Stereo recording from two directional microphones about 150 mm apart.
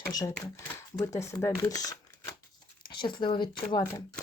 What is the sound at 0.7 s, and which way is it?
Speech, 20° left (ahead or behind).